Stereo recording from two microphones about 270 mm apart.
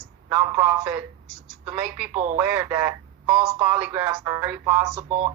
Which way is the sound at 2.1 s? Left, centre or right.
Right.